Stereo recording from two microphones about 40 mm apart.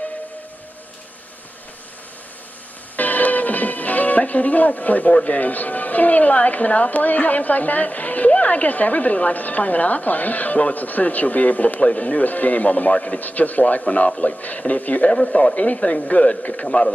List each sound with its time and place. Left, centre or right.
3.0 s music: left
5.1 s speech: left